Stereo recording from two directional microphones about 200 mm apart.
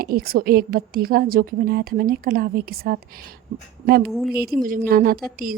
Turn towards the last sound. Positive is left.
turn(degrees=-45)  # may be behind; listen again after turning